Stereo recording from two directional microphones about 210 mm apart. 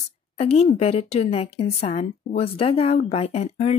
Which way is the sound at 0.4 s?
30° left (ahead or behind).